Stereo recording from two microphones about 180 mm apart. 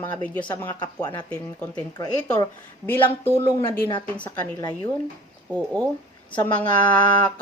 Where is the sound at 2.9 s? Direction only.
10° left (ahead or behind).